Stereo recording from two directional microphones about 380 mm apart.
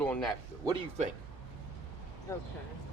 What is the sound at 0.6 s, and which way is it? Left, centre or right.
Speech, centre.